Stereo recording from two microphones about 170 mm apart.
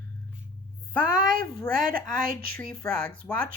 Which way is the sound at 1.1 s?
25° left (ahead or behind).